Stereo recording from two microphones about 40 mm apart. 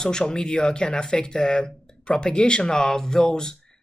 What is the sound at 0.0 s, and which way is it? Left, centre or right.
Speech, centre.